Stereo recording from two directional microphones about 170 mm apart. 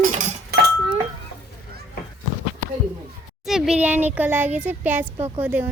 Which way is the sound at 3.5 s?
5° right (ahead or behind).